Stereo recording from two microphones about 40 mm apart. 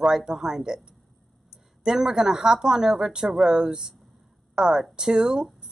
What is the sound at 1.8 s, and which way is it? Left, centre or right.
Speech, centre.